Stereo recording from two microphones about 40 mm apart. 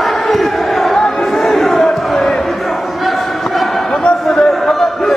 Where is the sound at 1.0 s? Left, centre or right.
Centre.